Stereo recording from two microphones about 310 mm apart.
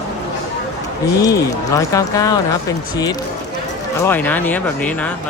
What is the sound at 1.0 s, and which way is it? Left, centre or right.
Speech, centre.